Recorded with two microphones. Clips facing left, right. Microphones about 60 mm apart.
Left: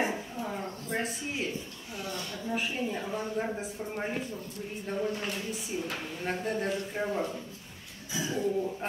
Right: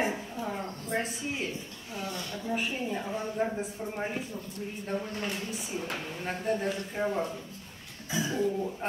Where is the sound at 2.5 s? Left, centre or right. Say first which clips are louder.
Even; centre.